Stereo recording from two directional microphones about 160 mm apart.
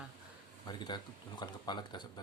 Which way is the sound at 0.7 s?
25° left (ahead or behind).